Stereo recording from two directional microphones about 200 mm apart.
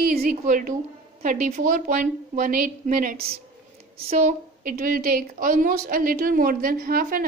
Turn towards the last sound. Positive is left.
turn(degrees=-45)  # may be behind; listen again after turning